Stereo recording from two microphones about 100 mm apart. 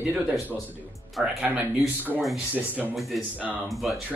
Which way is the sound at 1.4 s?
15° right (ahead or behind).